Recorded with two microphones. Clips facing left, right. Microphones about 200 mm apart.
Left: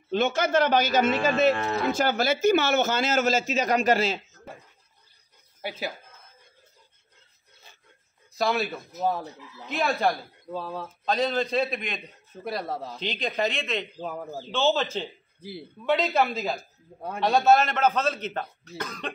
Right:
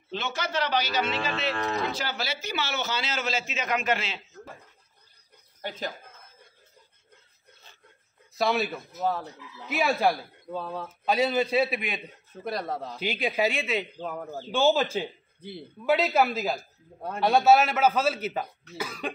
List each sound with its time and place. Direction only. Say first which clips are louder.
0.1 s a man's voice: left 8 dB; 50° left (ahead or behind)
5.6 s speech: left 1 dB; 10° left (ahead or behind)
8.4 s a man's voice: even; centre (ahead or behind)
13.0 s speech: right 2 dB; 10° right (ahead or behind)
13.9 s speech: left 1 dB; 5° left (ahead or behind)
14.5 s a man's voice: right 2 dB; 10° right (ahead or behind)